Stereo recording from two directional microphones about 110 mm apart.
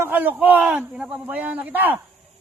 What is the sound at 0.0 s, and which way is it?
Speech, 15° right (ahead or behind).